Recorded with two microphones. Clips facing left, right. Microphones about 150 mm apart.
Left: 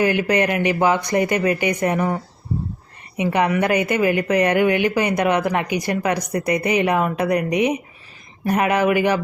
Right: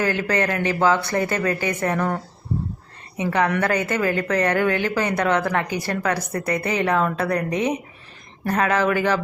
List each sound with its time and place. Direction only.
0.0 s speech: 15° left (ahead or behind)